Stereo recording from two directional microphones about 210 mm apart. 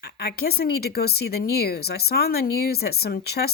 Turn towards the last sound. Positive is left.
turn(degrees=50)  # may be behind; listen again after turning